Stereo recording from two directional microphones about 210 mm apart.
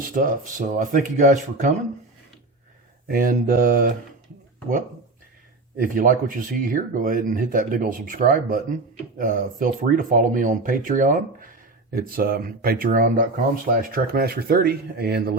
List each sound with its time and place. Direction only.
0.0 s speech: 40° right (ahead or behind)
3.1 s speech: 40° right (ahead or behind)
5.7 s speech: 40° right (ahead or behind)